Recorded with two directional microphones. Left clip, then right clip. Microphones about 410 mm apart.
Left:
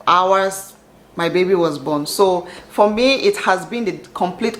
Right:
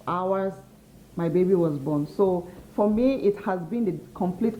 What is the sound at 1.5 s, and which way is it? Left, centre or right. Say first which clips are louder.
Speech: left 7 dB; centre.